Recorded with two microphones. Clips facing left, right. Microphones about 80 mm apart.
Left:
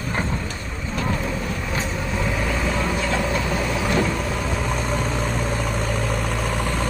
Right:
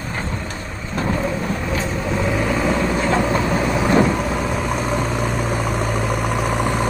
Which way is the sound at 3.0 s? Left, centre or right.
Right.